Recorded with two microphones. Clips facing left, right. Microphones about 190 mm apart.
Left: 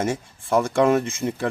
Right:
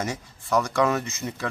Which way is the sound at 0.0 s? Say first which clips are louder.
Left 6 dB; 30° left (ahead or behind).